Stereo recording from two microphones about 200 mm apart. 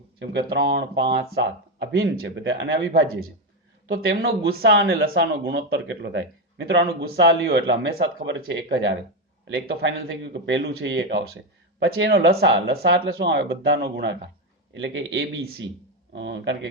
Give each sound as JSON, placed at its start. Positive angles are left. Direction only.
{"t": 0.2, "sound": "a man's voice", "side_deg": -55}
{"t": 1.3, "sound": "speech", "side_deg": -60}
{"t": 3.9, "sound": "a man's voice", "side_deg": -50}
{"t": 5.7, "sound": "speech", "side_deg": -65}
{"t": 12.1, "sound": "a man's voice", "side_deg": -55}
{"t": 15.4, "sound": "a man's voice", "side_deg": -55}
{"t": 16.1, "sound": "speech", "side_deg": -65}